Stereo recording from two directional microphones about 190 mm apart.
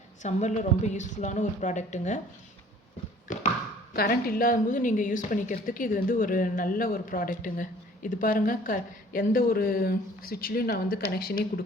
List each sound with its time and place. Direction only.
0.2 s a woman's voice: 40° left (ahead or behind)
3.3 s a sound: 45° left (ahead or behind)
3.9 s a woman's voice: 55° left (ahead or behind)